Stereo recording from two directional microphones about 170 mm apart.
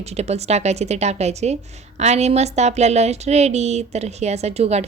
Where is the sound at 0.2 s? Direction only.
40° right (ahead or behind).